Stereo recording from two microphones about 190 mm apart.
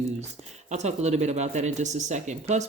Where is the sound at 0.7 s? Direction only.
35° right (ahead or behind).